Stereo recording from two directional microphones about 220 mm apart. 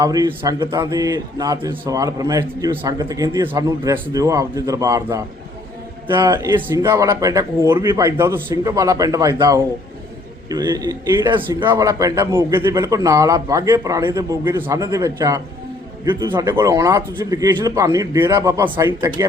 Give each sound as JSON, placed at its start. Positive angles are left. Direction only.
{"t": 0.0, "sound": "speech", "side_deg": -15}